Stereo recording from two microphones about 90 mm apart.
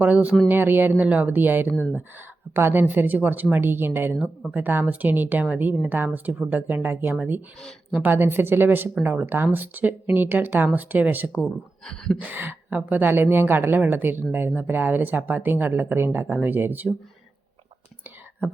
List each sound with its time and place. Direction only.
0.0 s speech: 15° right (ahead or behind)
11.4 s speech: 5° left (ahead or behind)
12.2 s speech: 20° right (ahead or behind)